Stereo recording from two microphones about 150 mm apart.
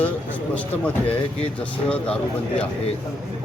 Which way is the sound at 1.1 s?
40° left (ahead or behind).